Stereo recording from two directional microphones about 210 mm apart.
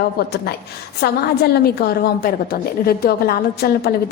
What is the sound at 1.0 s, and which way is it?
A woman's voice, 50° left (ahead or behind).